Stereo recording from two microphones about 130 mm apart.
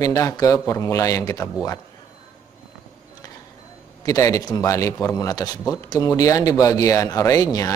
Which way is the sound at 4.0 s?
25° left (ahead or behind).